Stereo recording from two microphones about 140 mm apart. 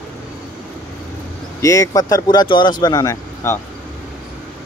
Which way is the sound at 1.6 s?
25° left (ahead or behind).